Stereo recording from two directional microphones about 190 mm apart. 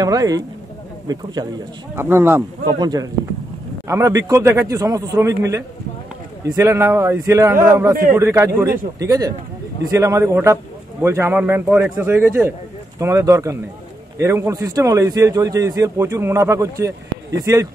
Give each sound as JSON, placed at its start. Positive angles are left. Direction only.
{"t": 0.0, "sound": "a man's voice", "side_deg": -20}